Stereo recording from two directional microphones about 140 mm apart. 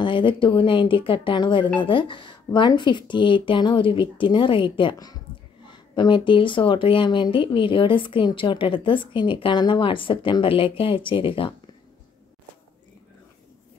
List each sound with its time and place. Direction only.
0.0 s a woman's voice: 35° left (ahead or behind)